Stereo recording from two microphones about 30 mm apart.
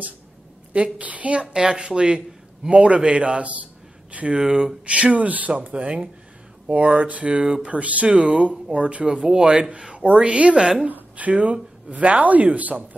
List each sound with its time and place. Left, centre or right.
0.7 s a woman's voice: right
1.5 s a woman's voice: right
4.3 s speech: right
4.8 s a woman's voice: right
5.1 s speech: right
5.7 s a woman's voice: right
6.7 s a woman's voice: right
8.1 s a woman's voice: right
11.9 s speech: right